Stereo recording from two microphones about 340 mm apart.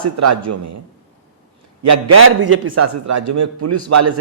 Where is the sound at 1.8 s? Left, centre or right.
Right.